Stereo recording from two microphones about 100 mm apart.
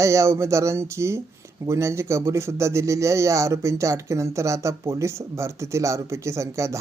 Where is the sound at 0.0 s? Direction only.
30° right (ahead or behind).